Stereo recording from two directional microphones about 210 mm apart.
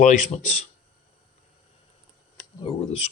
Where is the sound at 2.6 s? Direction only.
30° left (ahead or behind).